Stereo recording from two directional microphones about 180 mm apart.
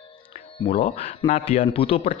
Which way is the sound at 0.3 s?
35° left (ahead or behind).